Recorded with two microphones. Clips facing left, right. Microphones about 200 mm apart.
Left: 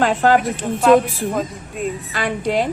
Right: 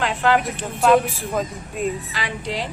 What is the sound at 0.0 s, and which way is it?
Speech, 45° left (ahead or behind).